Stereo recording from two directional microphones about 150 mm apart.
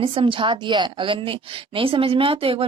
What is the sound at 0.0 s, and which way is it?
A woman's voice, 35° right (ahead or behind).